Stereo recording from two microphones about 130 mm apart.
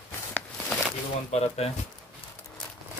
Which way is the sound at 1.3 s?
55° left (ahead or behind).